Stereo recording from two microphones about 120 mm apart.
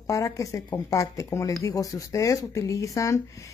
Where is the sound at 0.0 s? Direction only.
25° left (ahead or behind).